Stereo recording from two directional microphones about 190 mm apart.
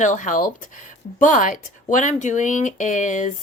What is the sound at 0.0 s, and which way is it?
A woman's voice, 40° left (ahead or behind).